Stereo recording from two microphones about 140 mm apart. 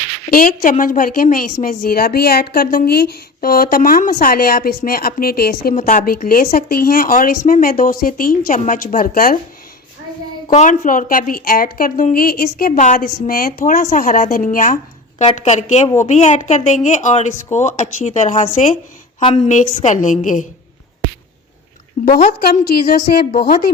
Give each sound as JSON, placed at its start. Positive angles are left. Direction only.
{"t": 0.3, "sound": "speech", "side_deg": 90}
{"t": 10.5, "sound": "speech", "side_deg": 60}
{"t": 15.2, "sound": "a woman's voice", "side_deg": 50}
{"t": 22.0, "sound": "speech", "side_deg": 90}